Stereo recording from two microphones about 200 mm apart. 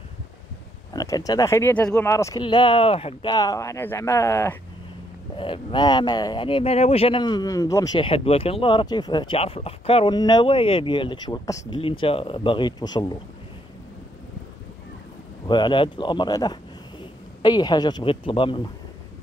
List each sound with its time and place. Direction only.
0.9 s speech: 20° left (ahead or behind)
5.4 s speech: 25° left (ahead or behind)
15.4 s speech: 20° left (ahead or behind)